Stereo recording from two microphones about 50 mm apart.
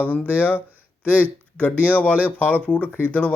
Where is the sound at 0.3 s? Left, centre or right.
Left.